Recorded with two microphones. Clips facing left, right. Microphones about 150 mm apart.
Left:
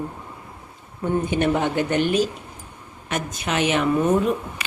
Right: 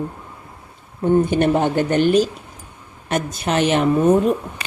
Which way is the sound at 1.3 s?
35° right (ahead or behind).